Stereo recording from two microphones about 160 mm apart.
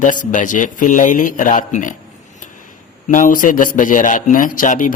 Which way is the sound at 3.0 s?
55° left (ahead or behind).